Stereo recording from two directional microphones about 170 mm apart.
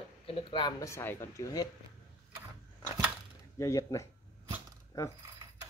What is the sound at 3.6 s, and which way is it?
Speech, 20° left (ahead or behind).